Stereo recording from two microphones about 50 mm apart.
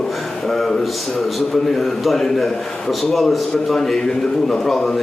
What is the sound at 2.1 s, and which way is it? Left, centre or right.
A man's voice, centre.